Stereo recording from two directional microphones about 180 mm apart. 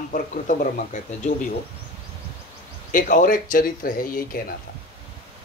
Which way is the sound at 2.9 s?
50° left (ahead or behind).